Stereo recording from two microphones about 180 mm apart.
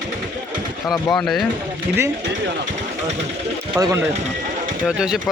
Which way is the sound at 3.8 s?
20° right (ahead or behind).